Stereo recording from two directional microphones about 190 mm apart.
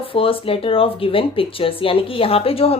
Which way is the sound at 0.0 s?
30° left (ahead or behind).